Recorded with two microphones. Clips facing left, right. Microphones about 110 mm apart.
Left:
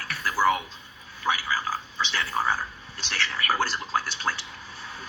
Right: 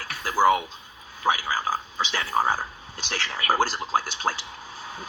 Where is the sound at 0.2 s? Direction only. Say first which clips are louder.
Right 3 dB; 40° right (ahead or behind).